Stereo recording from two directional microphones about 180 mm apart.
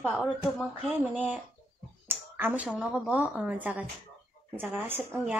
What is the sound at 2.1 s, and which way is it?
Speech, 10° right (ahead or behind).